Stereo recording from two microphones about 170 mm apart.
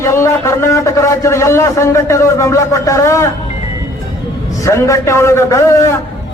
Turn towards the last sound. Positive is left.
turn(degrees=15)  # may be behind; listen again after turning